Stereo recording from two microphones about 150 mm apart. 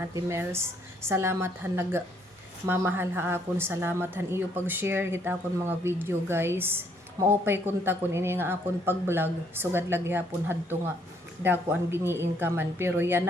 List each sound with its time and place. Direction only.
0.1 s a woman's voice: 15° right (ahead or behind)